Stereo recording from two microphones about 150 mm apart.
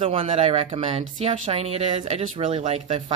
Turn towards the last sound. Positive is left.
turn(degrees=-45)  # may be behind; listen again after turning